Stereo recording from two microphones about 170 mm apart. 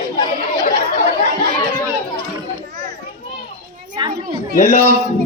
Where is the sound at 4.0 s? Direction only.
30° right (ahead or behind).